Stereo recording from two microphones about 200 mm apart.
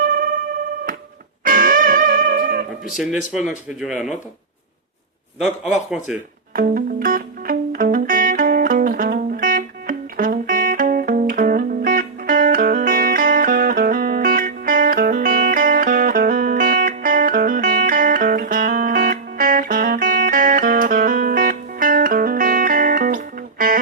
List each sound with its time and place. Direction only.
0.0 s music: 45° right (ahead or behind)
1.5 s music: 45° right (ahead or behind)
3.8 s speech: 5° right (ahead or behind)
5.6 s speech: 5° right (ahead or behind)
6.5 s music: 45° right (ahead or behind)